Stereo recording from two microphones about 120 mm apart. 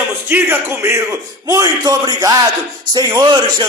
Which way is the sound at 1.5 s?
30° right (ahead or behind).